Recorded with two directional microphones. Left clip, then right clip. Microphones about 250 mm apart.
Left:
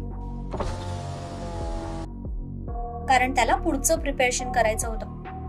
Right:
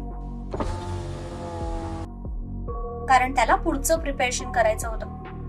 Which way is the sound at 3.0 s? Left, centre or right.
Left.